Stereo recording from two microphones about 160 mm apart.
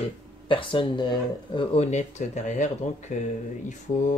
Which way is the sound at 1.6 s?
45° left (ahead or behind).